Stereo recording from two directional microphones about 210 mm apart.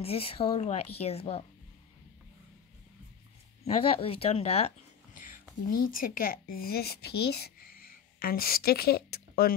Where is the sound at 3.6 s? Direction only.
25° left (ahead or behind).